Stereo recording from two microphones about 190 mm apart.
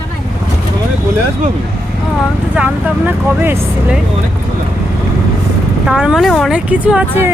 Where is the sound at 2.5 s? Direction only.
5° right (ahead or behind).